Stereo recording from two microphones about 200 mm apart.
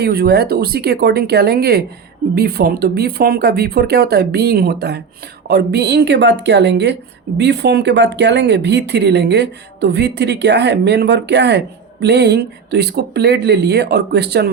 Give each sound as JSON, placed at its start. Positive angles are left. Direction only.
{"t": 0.0, "sound": "speech", "side_deg": -55}